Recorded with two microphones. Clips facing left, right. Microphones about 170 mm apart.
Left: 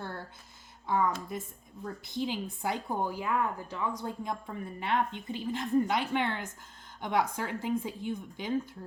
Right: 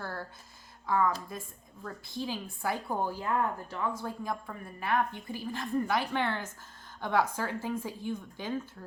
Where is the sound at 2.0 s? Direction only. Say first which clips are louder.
Left 3 dB; 20° left (ahead or behind).